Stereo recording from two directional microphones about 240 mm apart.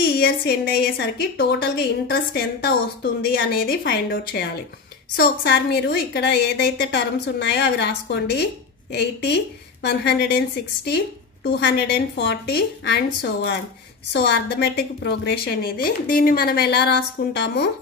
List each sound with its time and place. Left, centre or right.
0.0 s a woman's voice: left
11.4 s a woman's voice: left